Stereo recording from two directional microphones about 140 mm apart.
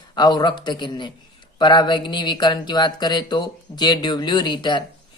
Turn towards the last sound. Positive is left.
turn(degrees=35)  # may be behind; listen again after turning